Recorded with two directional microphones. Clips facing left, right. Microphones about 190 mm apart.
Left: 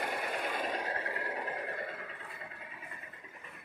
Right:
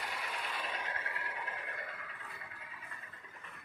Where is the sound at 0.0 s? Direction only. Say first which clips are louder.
Left 7 dB; 55° left (ahead or behind); by 3.0 s 30° left (ahead or behind).